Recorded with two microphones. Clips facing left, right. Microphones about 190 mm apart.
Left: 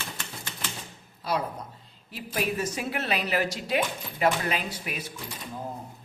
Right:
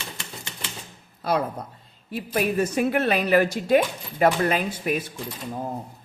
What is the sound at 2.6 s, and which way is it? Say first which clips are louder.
Speech: right 9 dB; 55° right (ahead or behind).